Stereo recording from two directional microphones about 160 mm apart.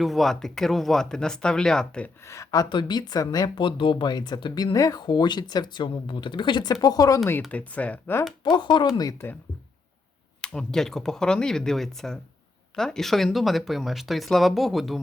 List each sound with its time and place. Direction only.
0.0 s speech: centre (ahead or behind)
2.2 s speech: 20° left (ahead or behind)
7.4 s speech: 10° left (ahead or behind)
8.4 s speech: 30° left (ahead or behind)
10.4 s speech: 5° left (ahead or behind)